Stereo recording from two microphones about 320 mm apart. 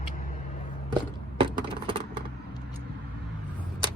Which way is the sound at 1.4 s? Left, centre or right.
Centre.